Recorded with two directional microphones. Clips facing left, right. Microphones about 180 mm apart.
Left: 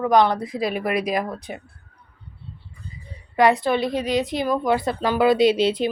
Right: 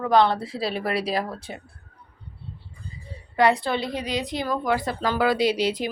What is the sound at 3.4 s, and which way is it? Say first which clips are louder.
A woman's voice: left 3 dB; 20° left (ahead or behind).